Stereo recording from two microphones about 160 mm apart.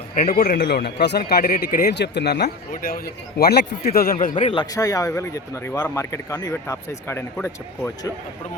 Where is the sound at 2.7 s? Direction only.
65° left (ahead or behind); by 3.7 s 80° left.